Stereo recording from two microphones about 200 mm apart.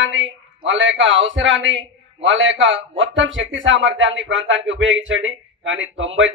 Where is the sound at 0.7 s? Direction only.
70° right (ahead or behind).